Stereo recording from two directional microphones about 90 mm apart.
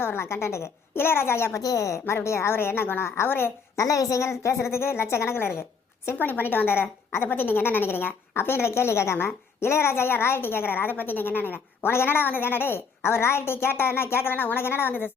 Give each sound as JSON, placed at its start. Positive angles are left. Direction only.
{"t": 0.0, "sound": "a woman's voice", "side_deg": 25}
{"t": 3.8, "sound": "a woman's voice", "side_deg": 35}